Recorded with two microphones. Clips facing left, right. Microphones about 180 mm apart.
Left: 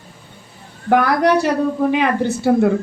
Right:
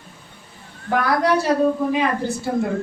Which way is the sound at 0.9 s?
65° left (ahead or behind).